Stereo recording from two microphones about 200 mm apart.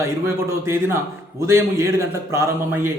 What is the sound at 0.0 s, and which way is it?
A man's voice, 15° right (ahead or behind).